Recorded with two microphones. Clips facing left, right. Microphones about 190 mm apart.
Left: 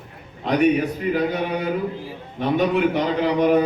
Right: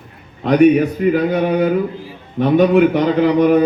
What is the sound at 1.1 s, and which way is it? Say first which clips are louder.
A man's voice: right 7 dB; 55° right (ahead or behind).